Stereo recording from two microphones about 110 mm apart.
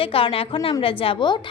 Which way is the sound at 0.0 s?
55° left (ahead or behind).